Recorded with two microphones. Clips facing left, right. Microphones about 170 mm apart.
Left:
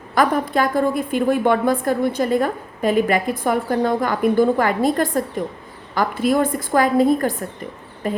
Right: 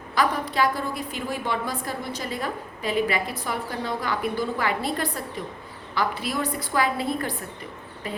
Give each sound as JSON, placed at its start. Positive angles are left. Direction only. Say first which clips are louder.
{"t": 0.1, "sound": "a woman's voice", "louder": "left 7 dB", "side_deg": 50}